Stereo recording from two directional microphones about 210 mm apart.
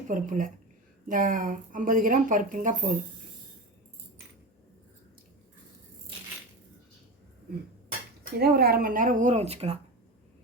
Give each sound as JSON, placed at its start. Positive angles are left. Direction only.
{"t": 0.1, "sound": "speech", "side_deg": -40}
{"t": 8.4, "sound": "speech", "side_deg": -45}